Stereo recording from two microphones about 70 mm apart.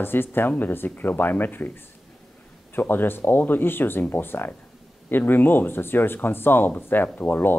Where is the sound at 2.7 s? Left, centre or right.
Left.